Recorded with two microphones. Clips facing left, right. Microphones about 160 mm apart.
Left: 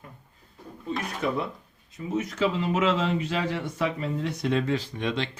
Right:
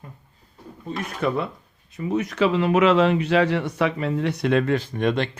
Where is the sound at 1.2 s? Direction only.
60° right (ahead or behind).